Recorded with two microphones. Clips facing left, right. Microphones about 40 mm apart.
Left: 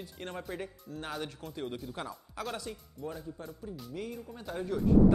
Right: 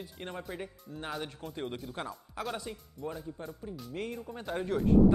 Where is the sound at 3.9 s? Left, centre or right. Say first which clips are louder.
Right 3 dB; right.